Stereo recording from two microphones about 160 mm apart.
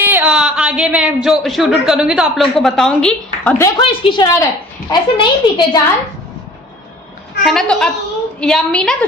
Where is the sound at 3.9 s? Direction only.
30° left (ahead or behind).